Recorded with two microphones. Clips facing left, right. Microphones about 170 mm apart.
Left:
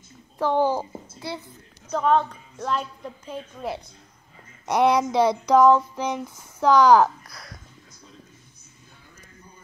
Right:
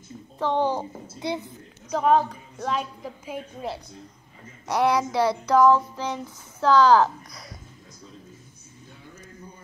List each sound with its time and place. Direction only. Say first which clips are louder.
0.4 s a child's voice: left 2 dB; 10° left (ahead or behind)
1.2 s speech: right 5 dB; 20° right (ahead or behind)
1.9 s a woman's voice: right 1 dB; 5° right (ahead or behind)
4.6 s child singing: left 3 dB; 20° left (ahead or behind)
7.2 s a woman's voice: right 1 dB; centre (ahead or behind)